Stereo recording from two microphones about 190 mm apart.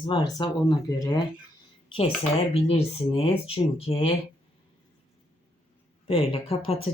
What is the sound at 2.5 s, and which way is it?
Speech, 30° left (ahead or behind).